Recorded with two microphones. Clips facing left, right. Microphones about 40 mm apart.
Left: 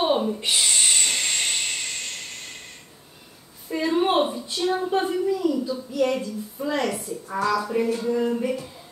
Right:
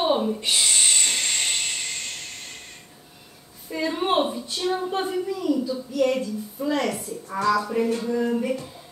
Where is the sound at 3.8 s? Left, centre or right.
Centre.